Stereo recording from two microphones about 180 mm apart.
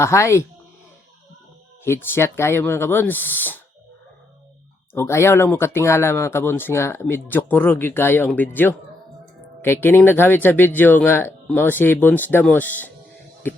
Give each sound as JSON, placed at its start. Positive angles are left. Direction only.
{"t": 0.0, "sound": "speech", "side_deg": 15}
{"t": 1.8, "sound": "speech", "side_deg": 15}
{"t": 4.9, "sound": "speech", "side_deg": 15}